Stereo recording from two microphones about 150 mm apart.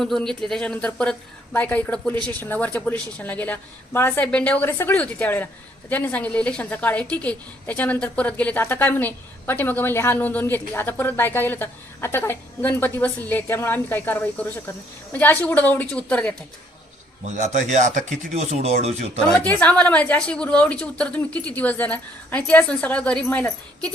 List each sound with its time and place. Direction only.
0.0 s a woman's voice: 5° left (ahead or behind)
17.2 s speech: 50° right (ahead or behind)
19.5 s a woman's voice: 10° left (ahead or behind)